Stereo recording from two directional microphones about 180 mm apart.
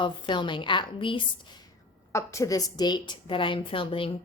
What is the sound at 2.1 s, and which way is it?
A woman's voice, 15° left (ahead or behind).